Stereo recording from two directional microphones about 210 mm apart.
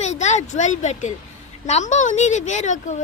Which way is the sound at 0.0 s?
35° left (ahead or behind).